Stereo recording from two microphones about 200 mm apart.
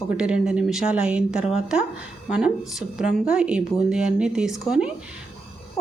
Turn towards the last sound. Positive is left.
turn(degrees=-5)  # may be behind; listen again after turning